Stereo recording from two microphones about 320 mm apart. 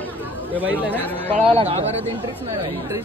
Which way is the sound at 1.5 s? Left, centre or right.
Centre.